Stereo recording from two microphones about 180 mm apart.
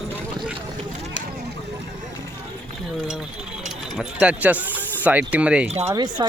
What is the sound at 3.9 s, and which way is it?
Speech, 5° right (ahead or behind).